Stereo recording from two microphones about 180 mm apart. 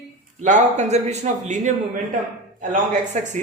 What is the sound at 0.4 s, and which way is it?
A man's voice, 40° right (ahead or behind).